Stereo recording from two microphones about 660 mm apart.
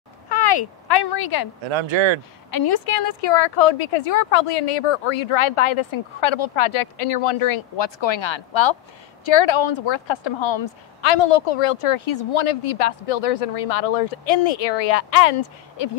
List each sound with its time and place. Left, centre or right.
0.3 s speech: left
1.7 s speech: right
2.5 s a woman's voice: left